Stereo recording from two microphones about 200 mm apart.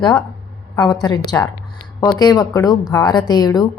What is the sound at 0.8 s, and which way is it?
A woman's voice, 20° left (ahead or behind).